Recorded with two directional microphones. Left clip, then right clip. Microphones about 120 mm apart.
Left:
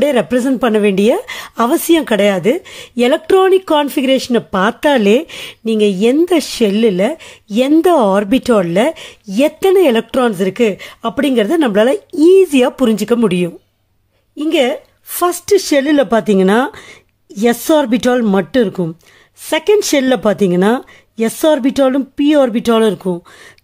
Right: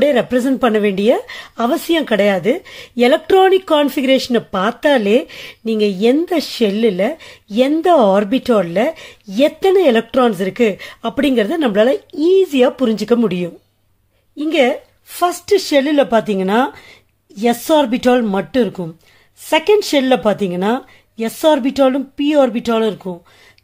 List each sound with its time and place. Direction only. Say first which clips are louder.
0.0 s speech: left 1 dB; 25° left (ahead or behind)
4.6 s speech: left 2 dB; 35° left (ahead or behind)
15.1 s speech: left 2 dB; 40° left (ahead or behind)